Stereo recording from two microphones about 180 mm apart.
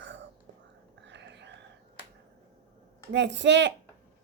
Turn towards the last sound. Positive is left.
turn(degrees=-80)